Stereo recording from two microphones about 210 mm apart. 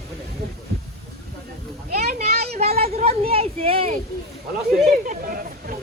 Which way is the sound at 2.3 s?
50° right (ahead or behind).